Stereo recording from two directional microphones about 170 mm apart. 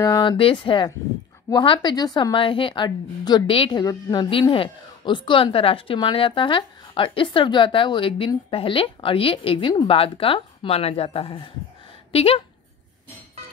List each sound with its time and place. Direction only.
0.0 s a woman's voice: 25° left (ahead or behind)